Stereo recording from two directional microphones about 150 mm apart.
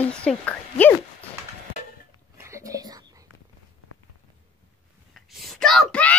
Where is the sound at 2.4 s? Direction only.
20° right (ahead or behind).